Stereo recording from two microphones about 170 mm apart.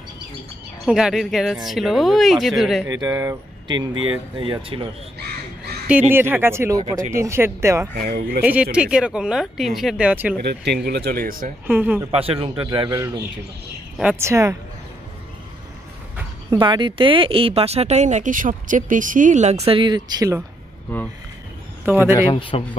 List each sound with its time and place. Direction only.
0.8 s speech: 5° right (ahead or behind)
2.9 s speech: 20° right (ahead or behind)
5.9 s speech: 10° right (ahead or behind)
8.0 s speech: 65° right (ahead or behind)
8.7 s speech: 5° right (ahead or behind)
10.4 s speech: 75° right (ahead or behind); by 11.5 s 55° right (ahead or behind)
11.6 s speech: 10° right (ahead or behind)
12.1 s speech: 35° right (ahead or behind); by 14.6 s 15° right (ahead or behind)
16.4 s speech: 25° right (ahead or behind)
21.8 s speech: 10° right (ahead or behind)
22.1 s speech: 30° left (ahead or behind)